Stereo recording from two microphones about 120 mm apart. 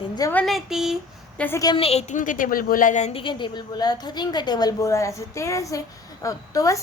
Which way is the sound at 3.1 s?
45° left (ahead or behind).